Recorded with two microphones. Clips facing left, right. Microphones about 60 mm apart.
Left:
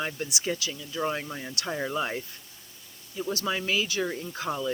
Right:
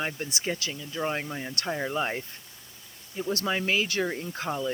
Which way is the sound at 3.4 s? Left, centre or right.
Right.